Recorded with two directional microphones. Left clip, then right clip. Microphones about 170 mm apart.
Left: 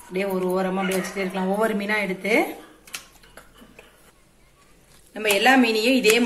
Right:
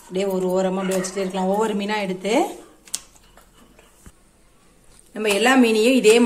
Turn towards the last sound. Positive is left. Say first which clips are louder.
# right 4 dB
turn(degrees=-55)  # may be behind; listen again after turning